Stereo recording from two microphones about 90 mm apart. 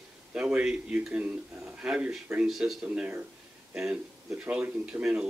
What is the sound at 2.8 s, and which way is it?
Speech, 15° right (ahead or behind).